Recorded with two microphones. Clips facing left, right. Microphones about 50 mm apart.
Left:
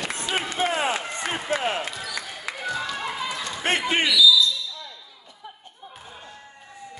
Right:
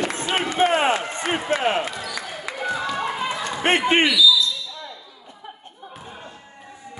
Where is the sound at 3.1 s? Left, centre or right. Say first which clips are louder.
Right 4 dB; right.